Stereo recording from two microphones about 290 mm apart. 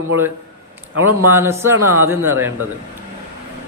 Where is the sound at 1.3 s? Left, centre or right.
Centre.